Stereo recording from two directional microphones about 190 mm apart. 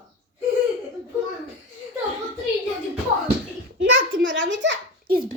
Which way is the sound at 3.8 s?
85° right.